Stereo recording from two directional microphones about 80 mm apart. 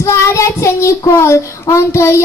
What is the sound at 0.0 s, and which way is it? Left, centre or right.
A woman's voice, left.